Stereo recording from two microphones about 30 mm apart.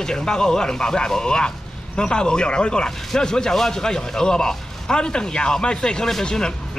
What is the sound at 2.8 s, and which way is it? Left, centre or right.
Speech, centre.